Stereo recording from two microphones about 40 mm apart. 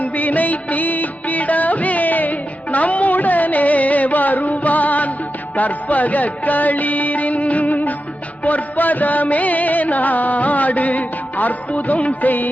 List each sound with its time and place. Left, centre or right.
0.0 s music of bollywood: left
5.5 s music: left
12.2 s music: left